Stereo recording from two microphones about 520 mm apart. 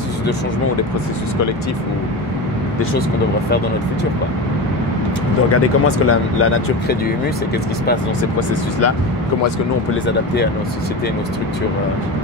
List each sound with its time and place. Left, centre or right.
5.5 s speech: left
10.0 s speech: centre